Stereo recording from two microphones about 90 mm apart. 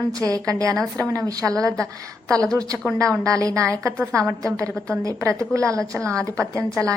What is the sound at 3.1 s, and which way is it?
A woman's voice, 35° right (ahead or behind).